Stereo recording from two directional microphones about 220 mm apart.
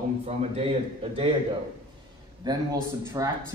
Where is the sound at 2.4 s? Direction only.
20° right (ahead or behind).